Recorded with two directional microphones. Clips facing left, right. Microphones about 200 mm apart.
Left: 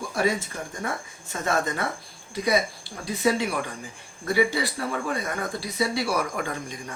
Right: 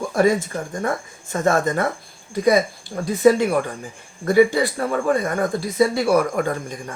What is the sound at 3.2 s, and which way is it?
Speech, 50° right (ahead or behind).